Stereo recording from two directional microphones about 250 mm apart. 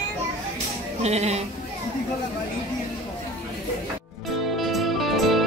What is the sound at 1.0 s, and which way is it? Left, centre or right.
Speech, right.